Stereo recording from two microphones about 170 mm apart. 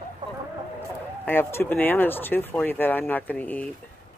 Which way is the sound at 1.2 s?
15° left (ahead or behind).